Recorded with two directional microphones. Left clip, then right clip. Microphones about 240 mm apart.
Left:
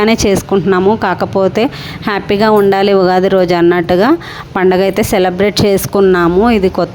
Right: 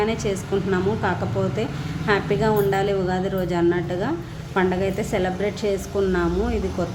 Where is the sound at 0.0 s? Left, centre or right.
Left.